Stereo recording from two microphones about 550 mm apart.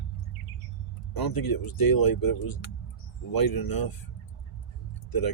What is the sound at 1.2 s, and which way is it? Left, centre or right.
Speech, left.